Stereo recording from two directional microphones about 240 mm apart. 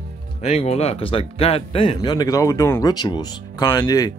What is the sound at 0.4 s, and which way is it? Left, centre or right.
Speech, left.